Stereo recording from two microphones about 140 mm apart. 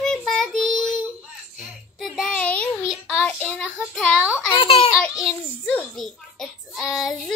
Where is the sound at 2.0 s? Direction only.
5° left (ahead or behind).